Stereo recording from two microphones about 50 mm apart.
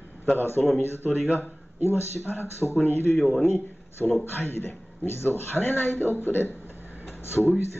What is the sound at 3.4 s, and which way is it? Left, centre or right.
A man's voice, left.